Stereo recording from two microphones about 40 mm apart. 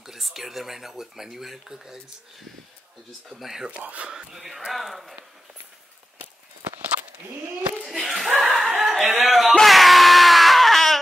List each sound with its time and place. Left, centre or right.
0.0 s speech: centre
3.3 s speech: centre
3.8 s speech: right
4.1 s speech: centre
7.8 s chuckle: centre
8.8 s a sound: centre
9.6 s screaming: centre